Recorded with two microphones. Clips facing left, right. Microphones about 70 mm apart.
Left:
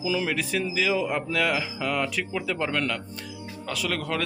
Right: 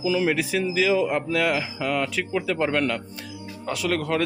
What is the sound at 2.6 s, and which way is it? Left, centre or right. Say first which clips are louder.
Speech: right 4 dB; centre.